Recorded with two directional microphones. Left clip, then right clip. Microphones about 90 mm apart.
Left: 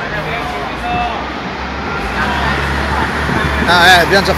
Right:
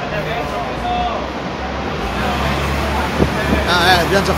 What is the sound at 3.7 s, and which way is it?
Speech, 15° left (ahead or behind).